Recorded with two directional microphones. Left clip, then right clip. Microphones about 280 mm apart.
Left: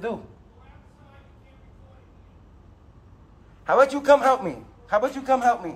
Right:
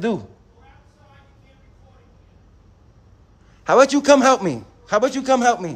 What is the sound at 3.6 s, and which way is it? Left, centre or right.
A man's voice, right.